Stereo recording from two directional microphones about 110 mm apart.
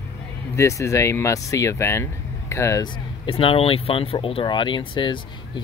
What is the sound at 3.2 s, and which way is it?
Speech, 55° left (ahead or behind).